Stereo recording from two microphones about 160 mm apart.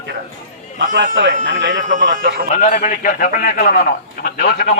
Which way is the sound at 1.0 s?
55° right (ahead or behind).